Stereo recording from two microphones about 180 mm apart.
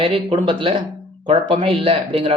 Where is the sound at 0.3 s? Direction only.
30° right (ahead or behind).